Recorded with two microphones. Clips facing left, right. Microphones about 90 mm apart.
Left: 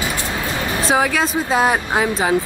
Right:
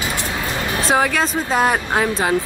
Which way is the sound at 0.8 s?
5° left (ahead or behind).